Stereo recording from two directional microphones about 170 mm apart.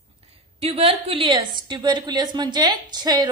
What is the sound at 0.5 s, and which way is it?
A woman's voice, 35° right (ahead or behind).